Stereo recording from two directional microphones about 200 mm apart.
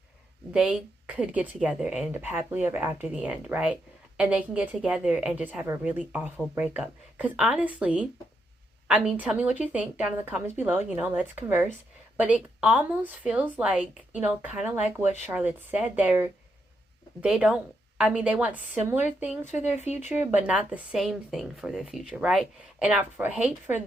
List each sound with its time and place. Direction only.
0.5 s a woman's voice: 5° right (ahead or behind)
19.5 s speech: 35° left (ahead or behind)
20.1 s a woman's voice: 5° right (ahead or behind)